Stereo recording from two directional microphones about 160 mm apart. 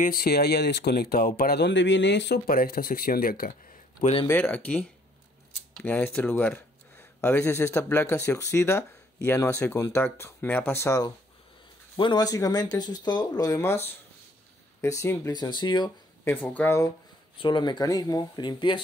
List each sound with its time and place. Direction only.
0.0 s speech: 70° left (ahead or behind)
4.0 s speech: 35° left (ahead or behind)
4.3 s speech: 10° left (ahead or behind)
14.8 s speech: 20° left (ahead or behind)
16.3 s speech: 10° left (ahead or behind)
17.4 s speech: 30° left (ahead or behind)